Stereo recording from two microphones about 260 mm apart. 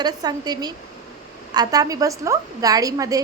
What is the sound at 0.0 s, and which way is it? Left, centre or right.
A woman's voice, centre.